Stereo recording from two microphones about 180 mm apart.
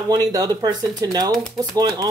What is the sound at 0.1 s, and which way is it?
Speech, 20° right (ahead or behind).